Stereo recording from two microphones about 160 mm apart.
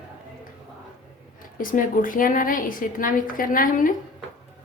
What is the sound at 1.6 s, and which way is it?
Speech, 60° left (ahead or behind).